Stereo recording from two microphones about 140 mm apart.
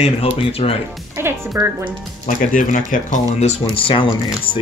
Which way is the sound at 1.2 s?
15° right (ahead or behind).